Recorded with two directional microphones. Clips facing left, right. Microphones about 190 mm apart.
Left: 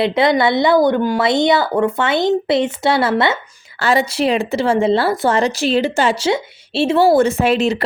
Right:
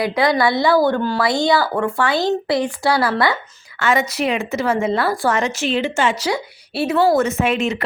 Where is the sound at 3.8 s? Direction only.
35° left (ahead or behind).